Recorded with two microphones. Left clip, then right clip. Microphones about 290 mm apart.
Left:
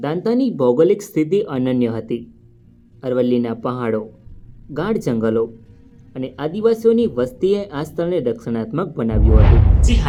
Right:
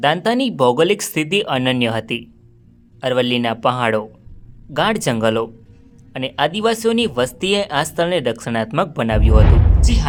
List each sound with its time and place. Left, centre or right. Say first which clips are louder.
0.0 s speech: right 3 dB; right
9.8 s speech: even; centre